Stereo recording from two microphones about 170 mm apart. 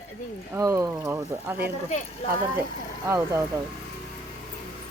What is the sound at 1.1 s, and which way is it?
Speech, 10° right (ahead or behind).